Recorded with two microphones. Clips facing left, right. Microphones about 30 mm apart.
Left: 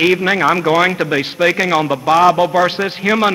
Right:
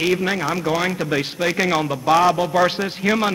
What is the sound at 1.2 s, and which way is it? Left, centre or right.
A man's voice, centre.